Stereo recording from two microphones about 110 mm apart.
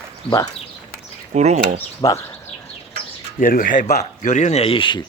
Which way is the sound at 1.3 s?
90° right.